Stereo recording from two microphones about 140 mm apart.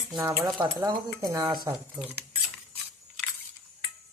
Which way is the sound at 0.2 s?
15° right (ahead or behind).